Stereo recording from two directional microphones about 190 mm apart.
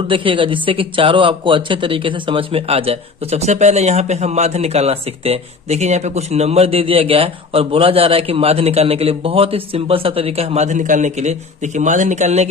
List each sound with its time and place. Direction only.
0.1 s speech: 25° right (ahead or behind)